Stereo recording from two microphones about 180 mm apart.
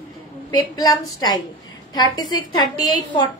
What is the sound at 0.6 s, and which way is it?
Speech, 20° left (ahead or behind).